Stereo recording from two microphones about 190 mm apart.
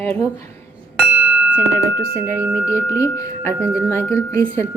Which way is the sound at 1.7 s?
15° left (ahead or behind).